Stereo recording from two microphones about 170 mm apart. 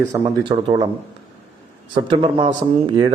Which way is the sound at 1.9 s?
30° right (ahead or behind).